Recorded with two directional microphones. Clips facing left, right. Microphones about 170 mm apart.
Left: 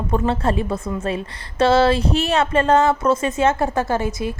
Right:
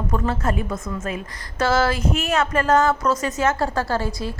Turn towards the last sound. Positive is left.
turn(degrees=20)  # may be behind; listen again after turning